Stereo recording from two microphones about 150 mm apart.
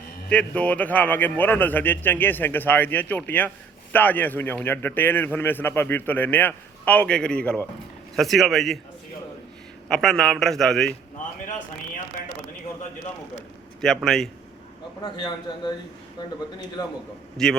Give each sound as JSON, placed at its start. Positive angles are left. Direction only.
{"t": 0.3, "sound": "a man's voice", "side_deg": 10}
{"t": 9.9, "sound": "a man's voice", "side_deg": 5}
{"t": 13.8, "sound": "a man's voice", "side_deg": 0}
{"t": 15.0, "sound": "a man's voice", "side_deg": 30}
{"t": 17.3, "sound": "a man's voice", "side_deg": 5}